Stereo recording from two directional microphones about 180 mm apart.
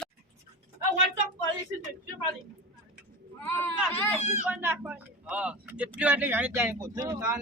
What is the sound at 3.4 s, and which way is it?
Speech, 10° left (ahead or behind).